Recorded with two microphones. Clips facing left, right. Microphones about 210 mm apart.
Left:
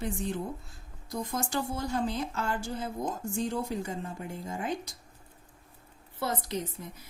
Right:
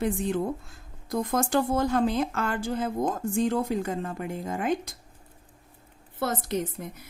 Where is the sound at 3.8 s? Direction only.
80° right; by 4.6 s 55° right (ahead or behind).